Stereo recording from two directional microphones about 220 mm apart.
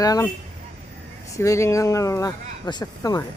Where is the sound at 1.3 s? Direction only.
15° left (ahead or behind).